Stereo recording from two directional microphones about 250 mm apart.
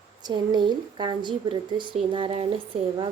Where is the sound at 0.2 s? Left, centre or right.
Centre.